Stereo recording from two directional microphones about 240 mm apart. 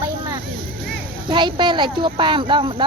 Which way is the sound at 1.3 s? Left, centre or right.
Centre.